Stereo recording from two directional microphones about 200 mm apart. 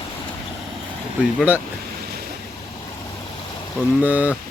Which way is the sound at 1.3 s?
10° right (ahead or behind).